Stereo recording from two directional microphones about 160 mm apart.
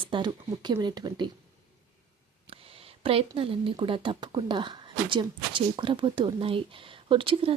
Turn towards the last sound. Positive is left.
turn(degrees=-35)  # may be behind; listen again after turning